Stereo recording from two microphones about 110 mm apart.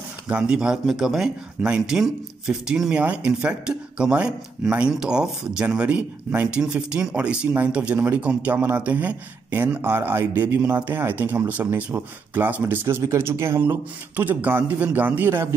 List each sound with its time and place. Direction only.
0.3 s speech: 10° right (ahead or behind)